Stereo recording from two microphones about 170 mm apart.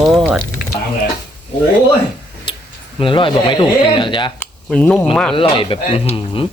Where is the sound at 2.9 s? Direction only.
30° left (ahead or behind).